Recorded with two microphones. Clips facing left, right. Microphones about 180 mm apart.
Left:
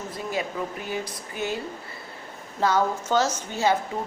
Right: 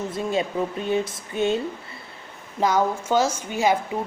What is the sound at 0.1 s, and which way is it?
Speech, 25° right (ahead or behind).